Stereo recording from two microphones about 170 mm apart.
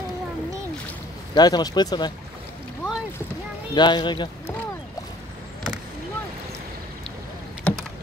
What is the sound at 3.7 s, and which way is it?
Speech, 25° left (ahead or behind).